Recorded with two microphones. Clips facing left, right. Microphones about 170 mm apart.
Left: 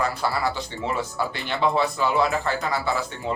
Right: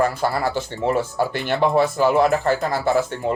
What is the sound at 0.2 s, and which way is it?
Speech, 50° right (ahead or behind).